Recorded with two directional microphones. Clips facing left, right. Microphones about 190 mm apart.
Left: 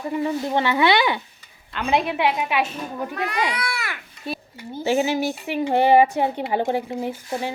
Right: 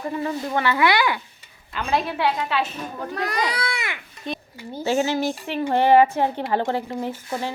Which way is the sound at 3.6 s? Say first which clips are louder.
Right 1 dB; 15° right (ahead or behind).